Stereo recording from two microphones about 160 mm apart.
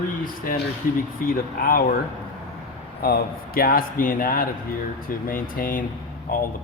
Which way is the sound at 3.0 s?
70° left (ahead or behind).